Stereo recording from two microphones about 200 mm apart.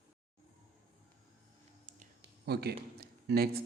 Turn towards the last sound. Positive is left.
turn(degrees=-50)  # may be behind; listen again after turning